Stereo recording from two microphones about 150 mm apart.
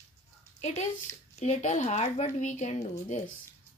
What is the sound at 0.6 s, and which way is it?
Speech, 50° left (ahead or behind).